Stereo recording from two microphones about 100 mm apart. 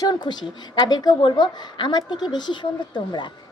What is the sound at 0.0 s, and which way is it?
A woman's voice, 45° left (ahead or behind).